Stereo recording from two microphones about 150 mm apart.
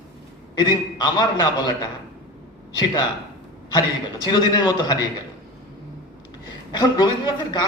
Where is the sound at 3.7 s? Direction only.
30° left (ahead or behind).